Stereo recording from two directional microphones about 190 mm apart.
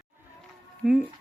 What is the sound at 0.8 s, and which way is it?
Music, centre (ahead or behind).